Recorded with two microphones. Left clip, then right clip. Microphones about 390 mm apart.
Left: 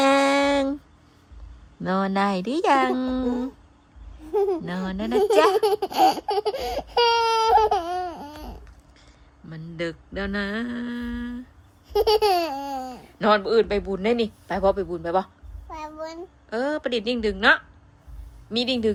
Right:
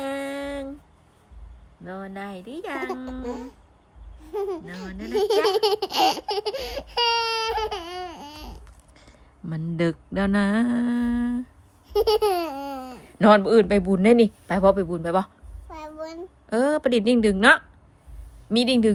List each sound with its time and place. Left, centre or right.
1.8 s speech: left
2.3 s baby laughter: centre
4.3 s speech: centre
9.5 s speech: centre
11.9 s baby laughter: centre
13.0 s speech: centre
15.7 s a sound: centre
16.5 s speech: centre